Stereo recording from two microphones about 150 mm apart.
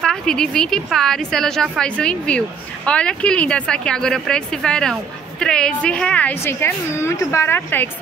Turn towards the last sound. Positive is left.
turn(degrees=15)  # may be behind; listen again after turning